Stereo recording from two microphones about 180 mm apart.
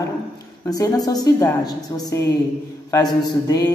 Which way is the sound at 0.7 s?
20° left (ahead or behind).